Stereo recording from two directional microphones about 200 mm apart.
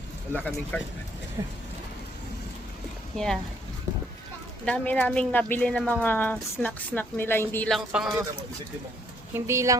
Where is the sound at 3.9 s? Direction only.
15° right (ahead or behind).